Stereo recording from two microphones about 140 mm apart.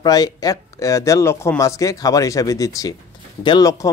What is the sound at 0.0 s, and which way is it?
Speech, 25° left (ahead or behind).